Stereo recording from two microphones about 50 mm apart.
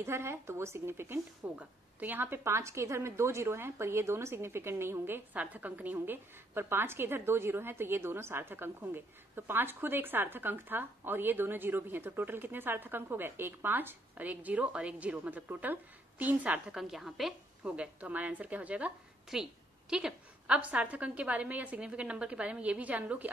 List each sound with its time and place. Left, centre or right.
0.0 s a woman's voice: right
1.4 s a woman's voice: right
2.0 s a woman's voice: right
5.3 s a woman's voice: right
5.9 s a woman's voice: right
16.7 s a woman's voice: centre
17.6 s a woman's voice: right
19.3 s a woman's voice: centre; by 23.3 s right